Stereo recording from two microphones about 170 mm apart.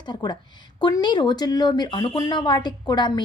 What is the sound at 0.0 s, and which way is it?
A woman's voice, 25° left (ahead or behind).